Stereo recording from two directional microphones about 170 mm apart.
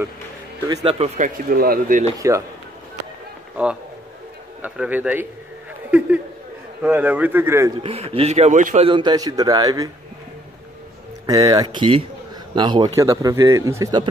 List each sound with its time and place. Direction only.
0.8 s speech: 35° right (ahead or behind); by 2.0 s 55° right (ahead or behind)
2.1 s a man's voice: 20° right (ahead or behind)
4.6 s a man's voice: 10° right (ahead or behind)
7.8 s a man's voice: 35° right (ahead or behind)
8.8 s speech: 25° right (ahead or behind)
11.2 s speech: 20° right (ahead or behind)